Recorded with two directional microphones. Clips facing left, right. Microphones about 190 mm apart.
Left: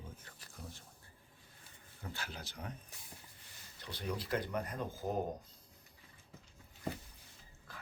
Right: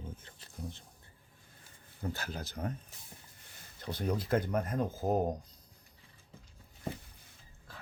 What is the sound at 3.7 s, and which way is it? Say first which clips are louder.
Speech: right 7 dB; 45° right (ahead or behind).